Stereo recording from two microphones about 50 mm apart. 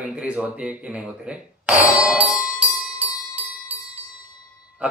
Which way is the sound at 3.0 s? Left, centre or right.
Right.